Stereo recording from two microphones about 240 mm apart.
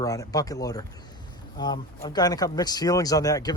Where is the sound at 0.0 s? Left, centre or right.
Centre.